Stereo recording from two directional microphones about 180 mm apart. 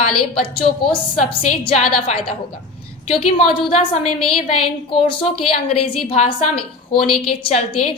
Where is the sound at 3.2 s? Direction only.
30° left (ahead or behind).